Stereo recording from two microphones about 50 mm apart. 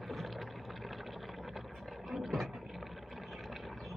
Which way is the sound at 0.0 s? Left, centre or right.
Centre.